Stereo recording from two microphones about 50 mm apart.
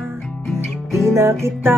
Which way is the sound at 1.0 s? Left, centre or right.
Right.